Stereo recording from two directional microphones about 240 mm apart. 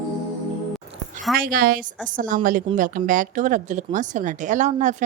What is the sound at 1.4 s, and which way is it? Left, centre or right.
Speech, right.